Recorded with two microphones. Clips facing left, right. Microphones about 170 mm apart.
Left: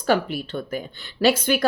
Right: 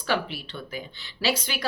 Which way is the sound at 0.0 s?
45° left (ahead or behind).